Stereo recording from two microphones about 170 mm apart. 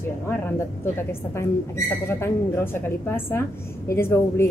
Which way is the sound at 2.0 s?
15° left (ahead or behind).